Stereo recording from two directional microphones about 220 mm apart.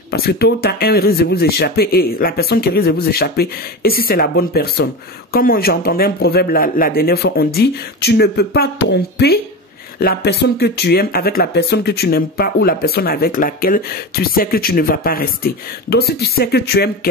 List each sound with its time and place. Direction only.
0.1 s speech: 45° left (ahead or behind)